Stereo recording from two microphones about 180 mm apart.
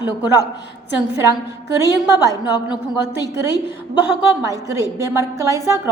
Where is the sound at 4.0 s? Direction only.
15° right (ahead or behind).